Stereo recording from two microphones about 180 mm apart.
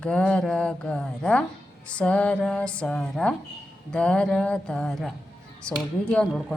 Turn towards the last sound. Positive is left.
turn(degrees=5)  # may be behind; listen again after turning